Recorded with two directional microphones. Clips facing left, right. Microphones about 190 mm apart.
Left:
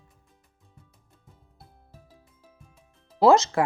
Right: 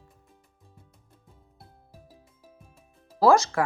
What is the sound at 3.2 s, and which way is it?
Speech, 20° left (ahead or behind).